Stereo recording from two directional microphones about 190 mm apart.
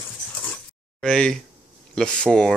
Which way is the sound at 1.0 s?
5° left (ahead or behind).